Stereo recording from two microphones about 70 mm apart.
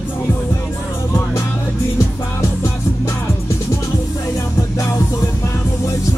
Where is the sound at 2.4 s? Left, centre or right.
Left.